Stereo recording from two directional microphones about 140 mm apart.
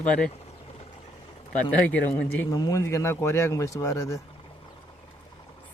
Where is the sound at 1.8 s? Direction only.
10° left (ahead or behind).